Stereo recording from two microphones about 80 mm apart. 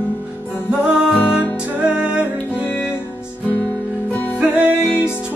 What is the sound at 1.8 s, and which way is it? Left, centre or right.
Music, centre.